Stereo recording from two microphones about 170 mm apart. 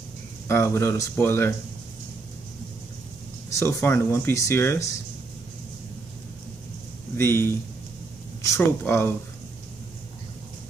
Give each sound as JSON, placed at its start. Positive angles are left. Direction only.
{"t": 0.5, "sound": "speech", "side_deg": 15}
{"t": 3.5, "sound": "speech", "side_deg": 15}
{"t": 7.2, "sound": "speech", "side_deg": 15}